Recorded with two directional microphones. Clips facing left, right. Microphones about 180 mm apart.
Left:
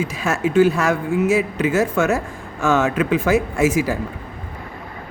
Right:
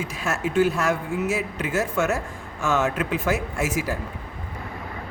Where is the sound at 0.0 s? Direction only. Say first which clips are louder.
Left 6 dB; 90° left.